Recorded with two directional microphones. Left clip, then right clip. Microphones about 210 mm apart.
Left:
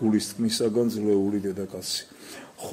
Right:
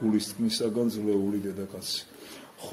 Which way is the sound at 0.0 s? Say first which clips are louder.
Left 3 dB; 50° left (ahead or behind).